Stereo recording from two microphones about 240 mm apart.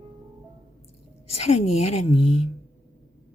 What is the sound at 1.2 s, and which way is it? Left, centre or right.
Speech, left.